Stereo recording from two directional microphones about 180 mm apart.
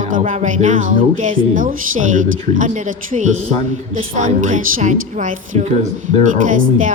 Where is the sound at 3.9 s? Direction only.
45° right (ahead or behind).